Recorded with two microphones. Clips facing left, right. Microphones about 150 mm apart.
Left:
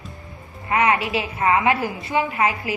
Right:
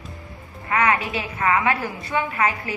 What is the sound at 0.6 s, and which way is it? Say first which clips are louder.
A woman's voice: left 2 dB; 25° left (ahead or behind).